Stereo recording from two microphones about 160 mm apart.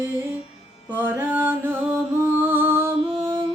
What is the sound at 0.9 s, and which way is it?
Mantra, 10° right (ahead or behind).